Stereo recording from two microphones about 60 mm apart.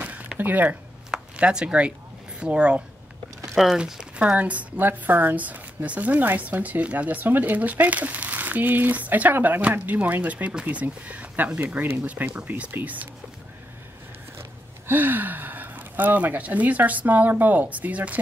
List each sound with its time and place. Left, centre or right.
0.0 s a sound: right
0.4 s speech: right
1.1 s speech: centre
14.9 s speech: right